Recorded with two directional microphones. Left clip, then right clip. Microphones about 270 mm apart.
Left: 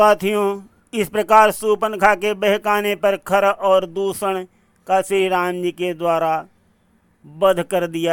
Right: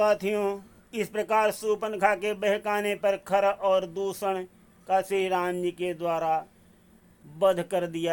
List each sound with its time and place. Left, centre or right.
0.0 s speech: left